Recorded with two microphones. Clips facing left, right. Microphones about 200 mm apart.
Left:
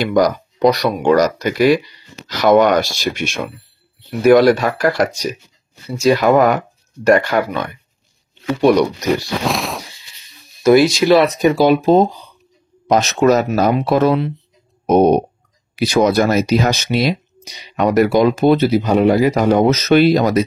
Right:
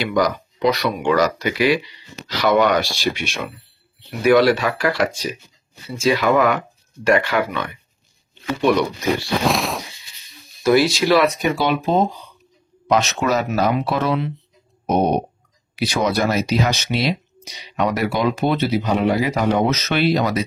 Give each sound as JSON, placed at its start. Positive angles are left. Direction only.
{"t": 0.0, "sound": "speech", "side_deg": 45}
{"t": 9.5, "sound": "a sound", "side_deg": 0}
{"t": 10.6, "sound": "speech", "side_deg": 20}
{"t": 11.2, "sound": "speech", "side_deg": 40}
{"t": 15.7, "sound": "speech", "side_deg": 45}